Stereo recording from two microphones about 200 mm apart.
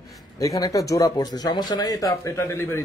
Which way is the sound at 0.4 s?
15° left (ahead or behind).